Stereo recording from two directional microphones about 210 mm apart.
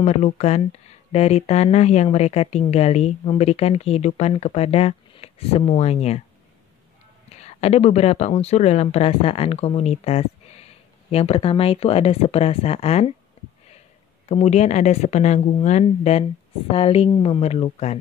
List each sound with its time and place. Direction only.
0.0 s speech: 30° left (ahead or behind)
7.3 s speech: 30° left (ahead or behind)
14.3 s a woman's voice: 30° left (ahead or behind)